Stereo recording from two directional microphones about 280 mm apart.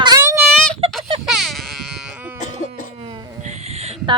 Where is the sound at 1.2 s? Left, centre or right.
Centre.